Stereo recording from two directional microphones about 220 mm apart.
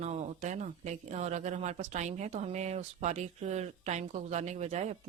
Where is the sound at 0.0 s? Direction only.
30° right (ahead or behind).